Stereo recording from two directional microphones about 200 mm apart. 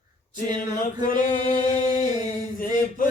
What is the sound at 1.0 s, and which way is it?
Mantra, 40° left (ahead or behind).